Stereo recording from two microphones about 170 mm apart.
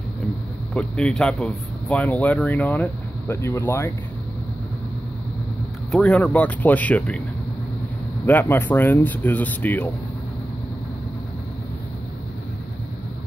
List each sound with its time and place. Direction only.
0.7 s speech: 5° left (ahead or behind)
5.9 s speech: 5° left (ahead or behind)
8.3 s speech: 10° left (ahead or behind)